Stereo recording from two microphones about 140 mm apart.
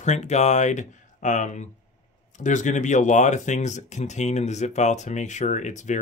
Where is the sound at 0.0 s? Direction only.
55° left (ahead or behind).